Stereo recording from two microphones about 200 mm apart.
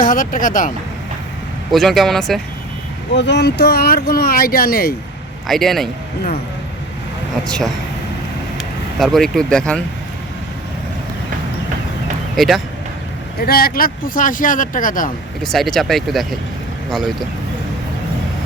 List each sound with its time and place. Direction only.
0.0 s speech: 40° left (ahead or behind)
1.7 s speech: centre (ahead or behind)
3.2 s speech: 60° left (ahead or behind)
5.5 s speech: centre (ahead or behind)
7.4 s speech: 5° left (ahead or behind)
9.0 s speech: centre (ahead or behind)
12.4 s speech: centre (ahead or behind)
13.4 s speech: 50° left (ahead or behind)
15.4 s speech: centre (ahead or behind)